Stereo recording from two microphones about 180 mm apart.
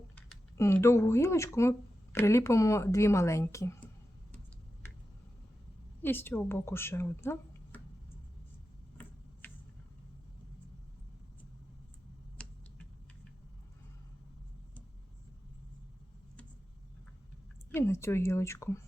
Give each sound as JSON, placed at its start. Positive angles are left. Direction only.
{"t": 0.5, "sound": "a woman's voice", "side_deg": 15}
{"t": 6.0, "sound": "speech", "side_deg": 10}
{"t": 12.4, "sound": "a sound", "side_deg": 5}
{"t": 17.7, "sound": "a woman's voice", "side_deg": 15}